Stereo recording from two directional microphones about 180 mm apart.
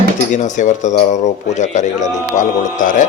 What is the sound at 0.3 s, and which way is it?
A man's voice, 45° left (ahead or behind).